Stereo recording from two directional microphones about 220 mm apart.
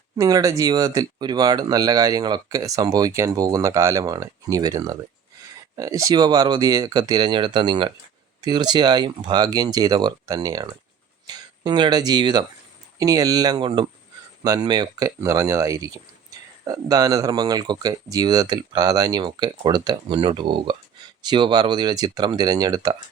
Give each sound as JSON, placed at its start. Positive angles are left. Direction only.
{"t": 0.2, "sound": "speech", "side_deg": -15}